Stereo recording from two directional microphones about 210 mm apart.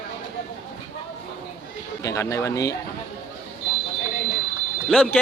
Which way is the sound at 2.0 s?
15° left (ahead or behind).